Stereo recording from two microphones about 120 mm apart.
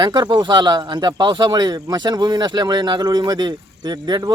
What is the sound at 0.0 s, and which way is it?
Speech, 40° right (ahead or behind).